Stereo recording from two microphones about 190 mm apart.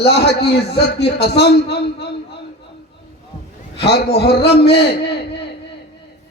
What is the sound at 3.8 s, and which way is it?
A man's voice, 60° left (ahead or behind).